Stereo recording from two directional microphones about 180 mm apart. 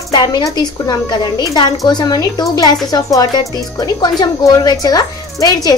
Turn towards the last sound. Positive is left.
turn(degrees=20)  # may be behind; listen again after turning